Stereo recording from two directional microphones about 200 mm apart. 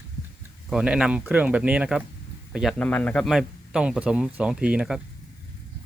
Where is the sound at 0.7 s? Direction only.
5° right (ahead or behind).